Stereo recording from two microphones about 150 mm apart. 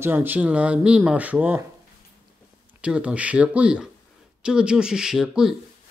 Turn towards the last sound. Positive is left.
turn(degrees=-5)  # may be behind; listen again after turning